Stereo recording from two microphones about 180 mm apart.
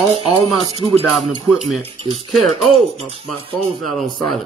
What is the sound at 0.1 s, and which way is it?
Speech, 35° right (ahead or behind).